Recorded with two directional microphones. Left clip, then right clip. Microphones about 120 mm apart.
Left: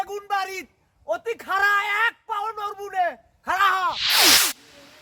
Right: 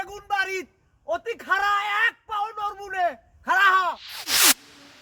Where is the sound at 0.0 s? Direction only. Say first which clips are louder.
Left 1 dB; 15° left (ahead or behind).